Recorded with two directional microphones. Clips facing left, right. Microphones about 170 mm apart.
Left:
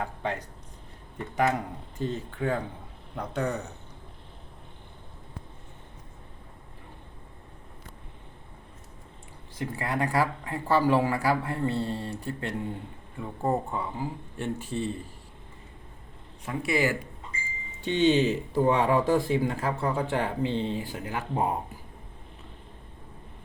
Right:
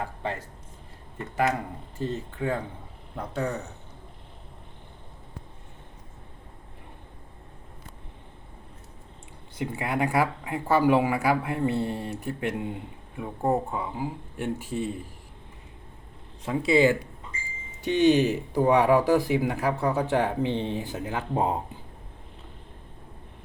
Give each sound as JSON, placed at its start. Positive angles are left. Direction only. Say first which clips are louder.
{"t": 0.0, "sound": "speech", "louder": "even", "side_deg": -5}
{"t": 9.6, "sound": "speech", "louder": "right 2 dB", "side_deg": -15}
{"t": 16.5, "sound": "speech", "louder": "right 6 dB", "side_deg": -25}